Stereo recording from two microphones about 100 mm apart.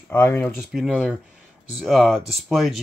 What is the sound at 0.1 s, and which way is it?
Speech, 20° left (ahead or behind).